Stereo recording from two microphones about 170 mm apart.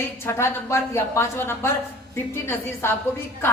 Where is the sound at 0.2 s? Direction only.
15° left (ahead or behind).